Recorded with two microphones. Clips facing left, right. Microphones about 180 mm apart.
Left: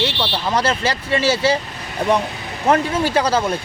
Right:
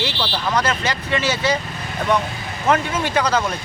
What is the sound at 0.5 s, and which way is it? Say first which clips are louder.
Speech: left 3 dB; 30° left (ahead or behind).